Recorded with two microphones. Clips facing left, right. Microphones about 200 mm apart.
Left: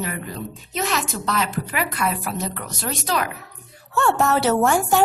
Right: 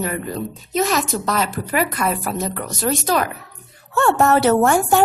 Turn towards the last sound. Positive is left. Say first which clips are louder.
# right 3 dB
turn(degrees=-55)  # may be behind; listen again after turning